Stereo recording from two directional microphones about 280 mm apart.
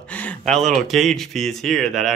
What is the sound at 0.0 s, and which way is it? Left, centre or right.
Speech, centre.